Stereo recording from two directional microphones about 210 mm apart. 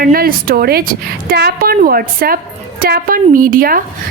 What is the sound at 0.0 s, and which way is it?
A woman's voice, 45° right (ahead or behind).